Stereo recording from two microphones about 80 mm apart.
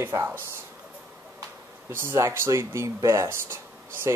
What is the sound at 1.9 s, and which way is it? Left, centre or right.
Speech, right.